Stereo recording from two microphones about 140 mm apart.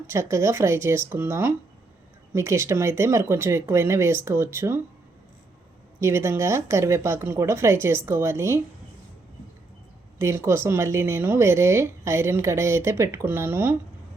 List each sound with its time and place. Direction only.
0.1 s speech: 20° right (ahead or behind)
6.0 s speech: 20° right (ahead or behind)
10.2 s speech: 20° right (ahead or behind)